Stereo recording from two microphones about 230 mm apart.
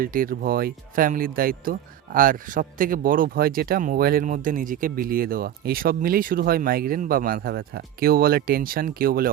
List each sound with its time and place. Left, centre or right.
0.0 s speech: right